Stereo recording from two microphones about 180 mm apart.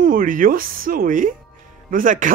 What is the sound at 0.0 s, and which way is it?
Speech, 50° right (ahead or behind).